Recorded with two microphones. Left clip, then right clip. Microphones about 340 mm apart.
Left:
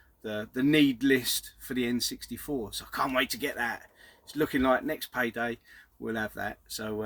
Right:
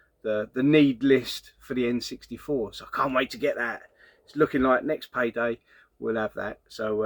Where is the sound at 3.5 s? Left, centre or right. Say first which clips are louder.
Right 3 dB; left.